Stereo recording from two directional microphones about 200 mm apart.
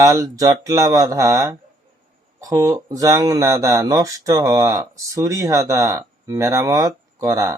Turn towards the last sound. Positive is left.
turn(degrees=-15)  # may be behind; listen again after turning